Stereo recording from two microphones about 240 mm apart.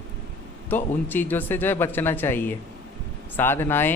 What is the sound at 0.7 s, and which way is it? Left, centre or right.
Speech, centre.